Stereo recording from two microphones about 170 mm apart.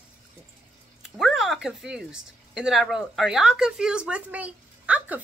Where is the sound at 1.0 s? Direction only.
Centre (ahead or behind).